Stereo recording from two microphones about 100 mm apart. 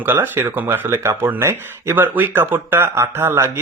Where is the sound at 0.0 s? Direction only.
20° right (ahead or behind).